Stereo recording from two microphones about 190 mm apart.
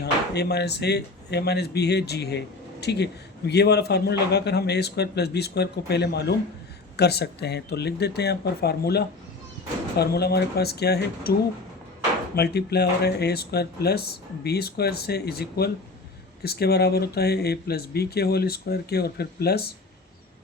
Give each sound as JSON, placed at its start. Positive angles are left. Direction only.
{"t": 0.0, "sound": "a man's voice", "side_deg": 60}
{"t": 12.4, "sound": "a man's voice", "side_deg": 60}